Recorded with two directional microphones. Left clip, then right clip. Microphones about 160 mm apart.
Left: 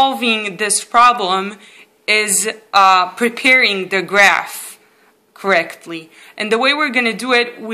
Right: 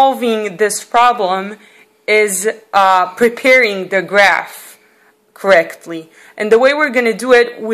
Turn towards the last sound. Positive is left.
turn(degrees=-40)  # may be behind; listen again after turning